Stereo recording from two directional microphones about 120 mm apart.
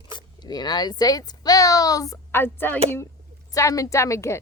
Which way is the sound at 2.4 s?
15° left (ahead or behind).